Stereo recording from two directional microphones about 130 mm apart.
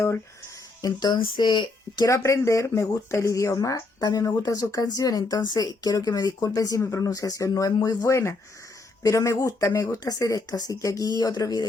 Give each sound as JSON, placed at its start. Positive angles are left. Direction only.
{"t": 0.8, "sound": "speech", "side_deg": 30}
{"t": 2.0, "sound": "speech", "side_deg": 25}